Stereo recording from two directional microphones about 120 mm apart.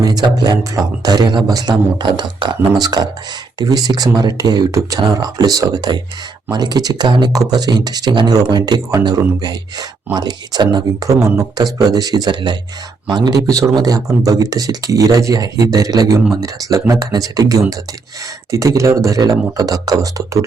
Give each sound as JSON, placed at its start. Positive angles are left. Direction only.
{"t": 0.0, "sound": "speech", "side_deg": -35}